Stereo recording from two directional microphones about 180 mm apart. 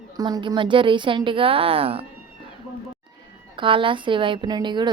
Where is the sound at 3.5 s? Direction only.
30° right (ahead or behind).